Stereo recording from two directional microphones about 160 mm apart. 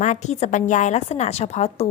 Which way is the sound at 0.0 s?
45° left (ahead or behind).